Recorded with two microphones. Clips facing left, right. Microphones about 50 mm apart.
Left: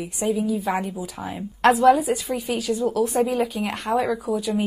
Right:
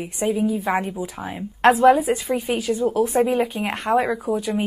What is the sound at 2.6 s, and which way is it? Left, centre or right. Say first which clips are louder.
A woman's voice: left 1 dB; centre.